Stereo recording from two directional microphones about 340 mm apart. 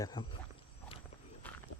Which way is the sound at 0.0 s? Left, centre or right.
Centre.